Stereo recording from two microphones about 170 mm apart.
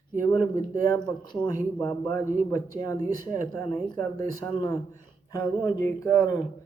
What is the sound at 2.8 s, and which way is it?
Speech, 20° left (ahead or behind).